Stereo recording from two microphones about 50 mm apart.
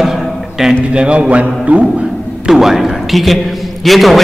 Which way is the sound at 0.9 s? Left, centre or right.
Right.